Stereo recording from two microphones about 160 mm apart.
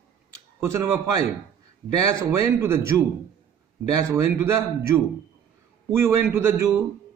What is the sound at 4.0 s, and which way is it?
Speech, 20° right (ahead or behind).